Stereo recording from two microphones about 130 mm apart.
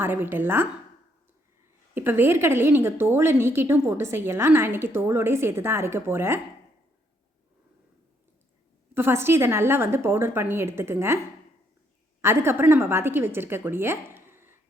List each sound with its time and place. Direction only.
0.0 s a woman's voice: 15° right (ahead or behind)
2.0 s a woman's voice: 15° right (ahead or behind)
9.0 s a woman's voice: 20° right (ahead or behind)
12.2 s a woman's voice: 20° right (ahead or behind)